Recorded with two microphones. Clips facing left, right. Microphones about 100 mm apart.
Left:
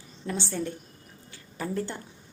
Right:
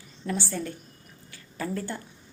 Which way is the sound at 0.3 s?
20° left (ahead or behind).